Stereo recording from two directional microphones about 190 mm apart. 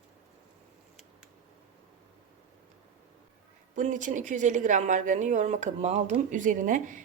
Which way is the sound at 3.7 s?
40° right (ahead or behind).